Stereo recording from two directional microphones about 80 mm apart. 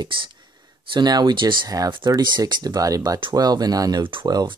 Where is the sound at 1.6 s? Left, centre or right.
Right.